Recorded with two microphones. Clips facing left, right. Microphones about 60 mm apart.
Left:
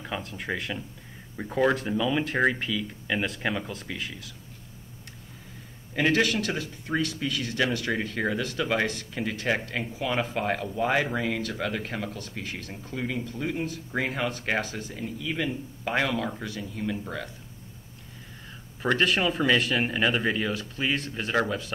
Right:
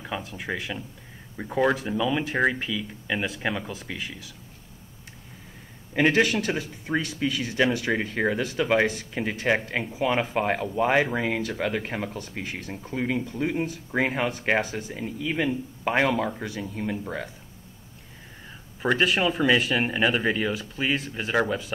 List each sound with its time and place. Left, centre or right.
0.0 s speech: centre
5.9 s speech: right
18.8 s speech: centre